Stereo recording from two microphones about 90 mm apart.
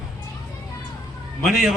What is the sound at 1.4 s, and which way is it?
Speech, 5° right (ahead or behind).